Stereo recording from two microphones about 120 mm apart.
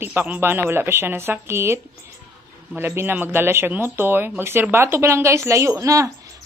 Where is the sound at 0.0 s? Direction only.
15° right (ahead or behind).